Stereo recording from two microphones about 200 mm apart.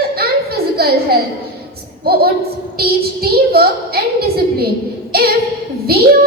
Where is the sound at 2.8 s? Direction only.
50° right (ahead or behind).